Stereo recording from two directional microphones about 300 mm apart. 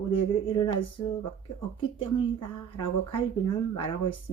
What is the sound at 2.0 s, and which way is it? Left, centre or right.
Speech, centre.